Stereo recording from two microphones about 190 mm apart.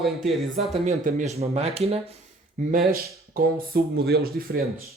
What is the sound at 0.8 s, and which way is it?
Speech, 40° right (ahead or behind).